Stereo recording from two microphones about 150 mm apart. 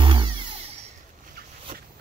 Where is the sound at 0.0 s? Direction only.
35° right (ahead or behind).